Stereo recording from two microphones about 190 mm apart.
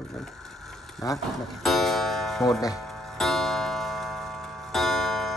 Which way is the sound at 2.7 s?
Centre (ahead or behind).